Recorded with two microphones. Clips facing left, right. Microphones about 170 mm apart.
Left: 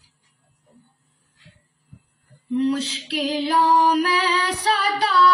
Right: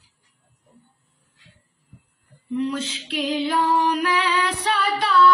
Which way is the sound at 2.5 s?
35° left (ahead or behind).